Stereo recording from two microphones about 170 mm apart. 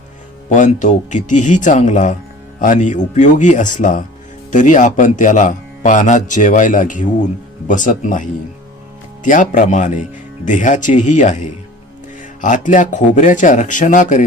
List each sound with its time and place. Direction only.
0.5 s a man's voice: 45° left (ahead or behind)